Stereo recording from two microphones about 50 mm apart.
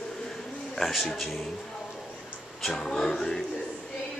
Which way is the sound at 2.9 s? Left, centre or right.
Centre.